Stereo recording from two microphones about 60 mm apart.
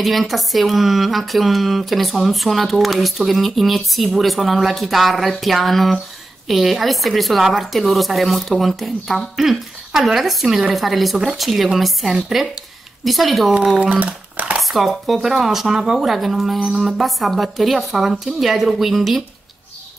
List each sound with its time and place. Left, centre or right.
0.0 s speech: centre
13.7 s speech: right
14.6 s speech: centre